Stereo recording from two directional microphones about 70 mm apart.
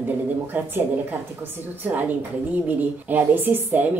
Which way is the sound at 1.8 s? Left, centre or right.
Right.